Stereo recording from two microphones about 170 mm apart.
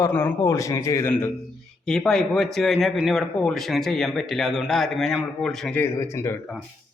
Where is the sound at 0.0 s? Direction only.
15° left (ahead or behind).